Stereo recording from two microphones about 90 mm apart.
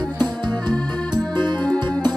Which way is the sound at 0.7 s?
55° right (ahead or behind).